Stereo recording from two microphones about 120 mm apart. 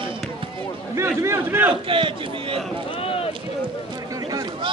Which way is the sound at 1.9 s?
45° right (ahead or behind).